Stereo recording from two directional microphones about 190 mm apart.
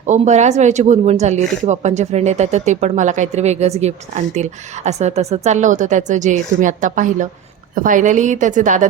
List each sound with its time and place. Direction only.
0.0 s speech: 40° right (ahead or behind)